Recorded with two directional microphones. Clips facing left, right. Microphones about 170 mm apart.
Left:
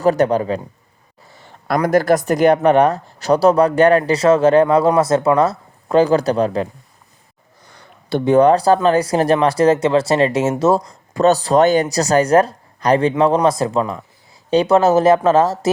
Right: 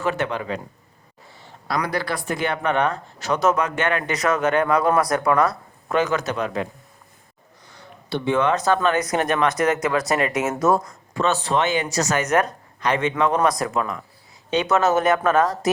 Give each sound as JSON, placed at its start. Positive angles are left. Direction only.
{"t": 0.0, "sound": "speech", "side_deg": 40}
{"t": 1.6, "sound": "speech", "side_deg": 50}
{"t": 8.1, "sound": "speech", "side_deg": 40}